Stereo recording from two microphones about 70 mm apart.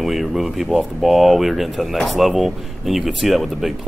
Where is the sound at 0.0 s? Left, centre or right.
Centre.